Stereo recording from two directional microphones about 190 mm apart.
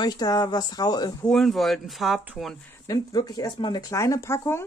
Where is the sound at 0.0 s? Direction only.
20° left (ahead or behind).